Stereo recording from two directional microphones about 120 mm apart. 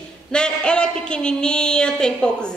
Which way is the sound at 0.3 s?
5° left (ahead or behind).